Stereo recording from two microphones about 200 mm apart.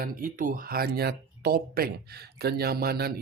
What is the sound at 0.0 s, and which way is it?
Speech, 45° right (ahead or behind).